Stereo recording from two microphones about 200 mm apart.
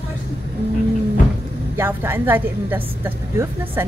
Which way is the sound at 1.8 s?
10° right (ahead or behind).